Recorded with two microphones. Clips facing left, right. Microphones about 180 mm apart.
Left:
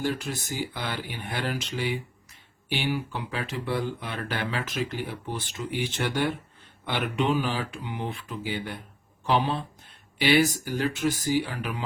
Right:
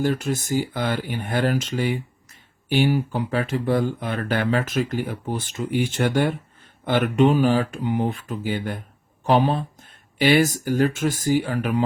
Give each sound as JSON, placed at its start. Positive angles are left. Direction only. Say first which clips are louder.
{"t": 0.0, "sound": "speech", "louder": "right 7 dB", "side_deg": -45}